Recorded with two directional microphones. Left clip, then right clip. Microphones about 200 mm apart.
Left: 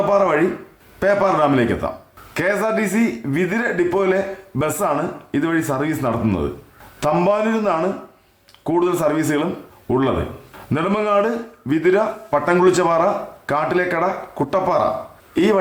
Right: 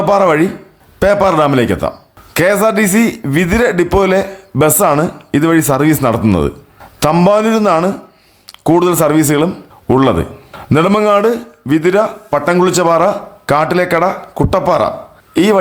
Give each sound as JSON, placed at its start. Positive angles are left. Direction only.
{"t": 0.1, "sound": "a man's voice", "side_deg": -40}